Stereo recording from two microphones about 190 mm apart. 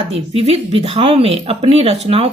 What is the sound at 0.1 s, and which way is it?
A woman's voice, 35° right (ahead or behind).